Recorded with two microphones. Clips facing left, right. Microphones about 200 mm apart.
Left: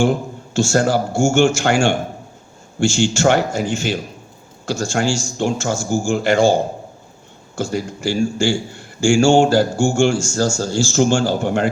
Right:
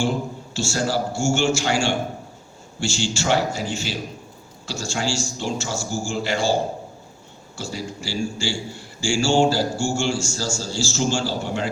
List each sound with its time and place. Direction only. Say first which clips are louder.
0.0 s a man's voice: left 6 dB; 50° left (ahead or behind)